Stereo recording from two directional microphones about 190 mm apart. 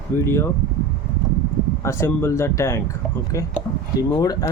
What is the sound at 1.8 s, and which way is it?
Speech, 15° left (ahead or behind).